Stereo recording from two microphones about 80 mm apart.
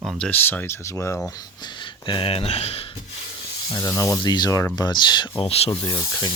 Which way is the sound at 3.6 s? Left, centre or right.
Left.